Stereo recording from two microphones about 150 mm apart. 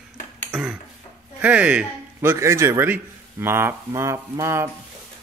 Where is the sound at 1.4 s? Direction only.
10° right (ahead or behind).